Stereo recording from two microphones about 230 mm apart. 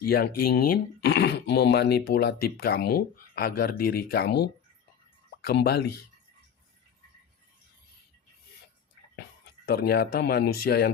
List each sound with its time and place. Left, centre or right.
0.1 s speech: left
5.5 s speech: left
9.6 s speech: left